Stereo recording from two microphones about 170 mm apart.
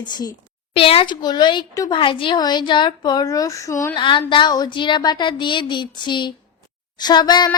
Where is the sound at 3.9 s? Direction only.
30° left (ahead or behind).